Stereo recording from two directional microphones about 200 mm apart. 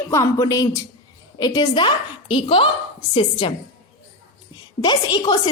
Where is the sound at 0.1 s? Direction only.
15° left (ahead or behind).